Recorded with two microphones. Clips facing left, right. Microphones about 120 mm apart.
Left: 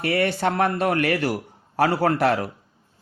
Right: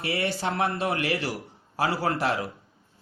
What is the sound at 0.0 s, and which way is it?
Speech, 55° left (ahead or behind).